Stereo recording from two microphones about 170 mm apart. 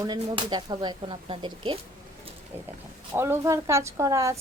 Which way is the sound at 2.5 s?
15° right (ahead or behind).